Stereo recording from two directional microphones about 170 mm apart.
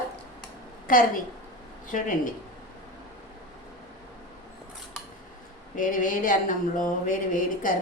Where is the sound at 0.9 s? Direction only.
55° left (ahead or behind).